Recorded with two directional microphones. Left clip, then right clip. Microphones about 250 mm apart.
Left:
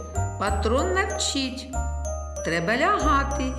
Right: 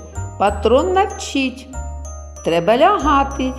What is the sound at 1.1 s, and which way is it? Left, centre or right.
Music, centre.